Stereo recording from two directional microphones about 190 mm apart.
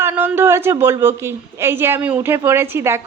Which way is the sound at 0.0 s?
10° right (ahead or behind).